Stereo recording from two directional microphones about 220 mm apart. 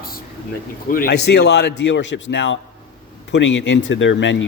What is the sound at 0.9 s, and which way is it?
A man's voice, 40° left (ahead or behind).